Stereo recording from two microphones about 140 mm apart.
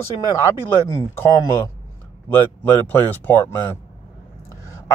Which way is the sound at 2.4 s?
15° left (ahead or behind).